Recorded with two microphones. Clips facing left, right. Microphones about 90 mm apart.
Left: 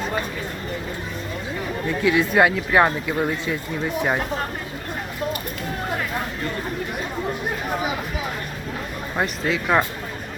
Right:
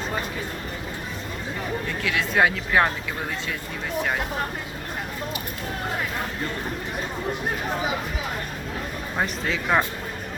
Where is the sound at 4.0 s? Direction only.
15° left (ahead or behind).